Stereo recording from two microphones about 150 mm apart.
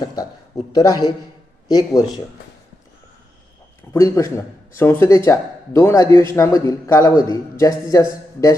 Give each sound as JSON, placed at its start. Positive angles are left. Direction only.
{"t": 0.0, "sound": "a man's voice", "side_deg": 25}
{"t": 3.9, "sound": "a man's voice", "side_deg": 20}